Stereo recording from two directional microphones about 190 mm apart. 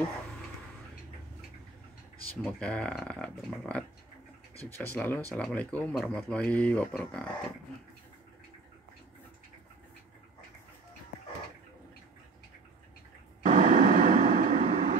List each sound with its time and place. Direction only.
2.4 s speech: 5° left (ahead or behind)
13.4 s vehicle: 45° right (ahead or behind)